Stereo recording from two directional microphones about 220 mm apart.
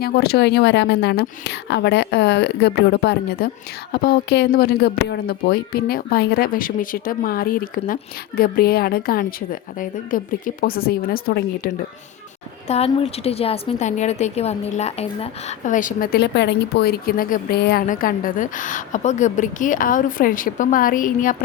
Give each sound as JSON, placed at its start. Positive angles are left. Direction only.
{"t": 0.0, "sound": "speech", "side_deg": 45}
{"t": 12.6, "sound": "a woman's voice", "side_deg": 30}